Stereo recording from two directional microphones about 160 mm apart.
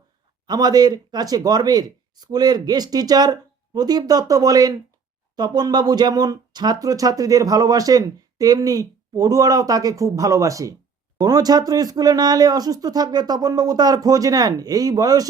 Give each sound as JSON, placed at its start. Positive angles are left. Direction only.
{"t": 0.4, "sound": "speech", "side_deg": -25}